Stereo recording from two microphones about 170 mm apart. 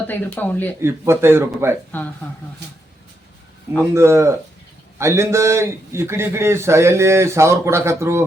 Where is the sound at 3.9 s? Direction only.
15° right (ahead or behind).